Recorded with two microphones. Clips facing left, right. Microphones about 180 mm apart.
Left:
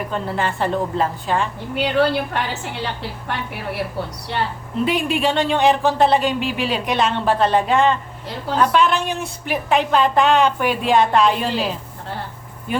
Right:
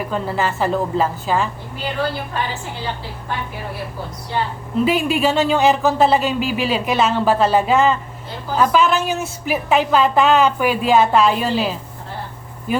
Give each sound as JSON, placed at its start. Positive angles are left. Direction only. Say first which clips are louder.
{"t": 0.1, "sound": "a woman's voice", "louder": "right 3 dB", "side_deg": -5}
{"t": 1.7, "sound": "a woman's voice", "louder": "left 8 dB", "side_deg": 75}
{"t": 4.9, "sound": "a woman's voice", "louder": "right 2 dB", "side_deg": 0}